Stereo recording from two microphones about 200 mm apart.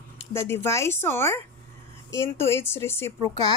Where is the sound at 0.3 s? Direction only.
10° left (ahead or behind).